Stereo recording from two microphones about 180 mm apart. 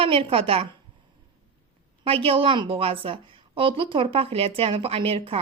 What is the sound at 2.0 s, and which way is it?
A woman's voice, 30° right (ahead or behind).